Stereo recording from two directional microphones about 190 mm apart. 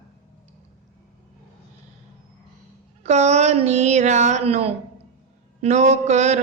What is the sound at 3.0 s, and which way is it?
A woman's voice, 35° right (ahead or behind).